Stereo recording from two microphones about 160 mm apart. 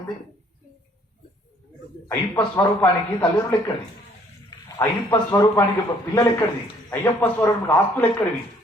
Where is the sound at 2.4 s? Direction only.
10° left (ahead or behind).